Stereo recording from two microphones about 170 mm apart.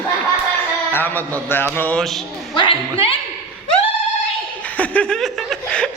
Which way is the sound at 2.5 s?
30° left (ahead or behind).